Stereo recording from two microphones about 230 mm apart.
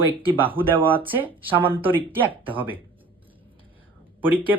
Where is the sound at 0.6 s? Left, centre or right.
Centre.